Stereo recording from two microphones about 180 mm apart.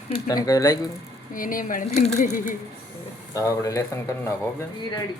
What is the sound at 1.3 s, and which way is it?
Speech, 50° left (ahead or behind).